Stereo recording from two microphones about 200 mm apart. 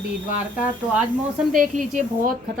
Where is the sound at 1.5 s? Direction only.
40° right (ahead or behind).